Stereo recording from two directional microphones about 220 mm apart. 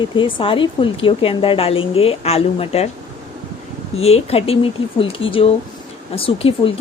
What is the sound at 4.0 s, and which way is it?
A woman's voice, 25° left (ahead or behind).